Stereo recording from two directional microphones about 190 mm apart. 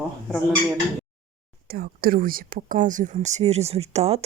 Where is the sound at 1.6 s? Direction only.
55° right (ahead or behind).